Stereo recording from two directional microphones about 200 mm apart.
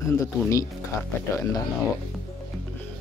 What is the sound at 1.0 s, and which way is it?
Speech, 15° left (ahead or behind).